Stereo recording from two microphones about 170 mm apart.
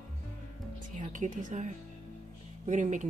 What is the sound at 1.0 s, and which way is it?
Speech, 45° right (ahead or behind).